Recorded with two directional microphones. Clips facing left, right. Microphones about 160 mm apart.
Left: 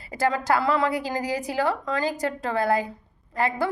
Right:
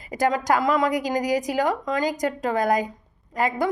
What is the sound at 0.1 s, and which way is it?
A woman's voice, 15° right (ahead or behind).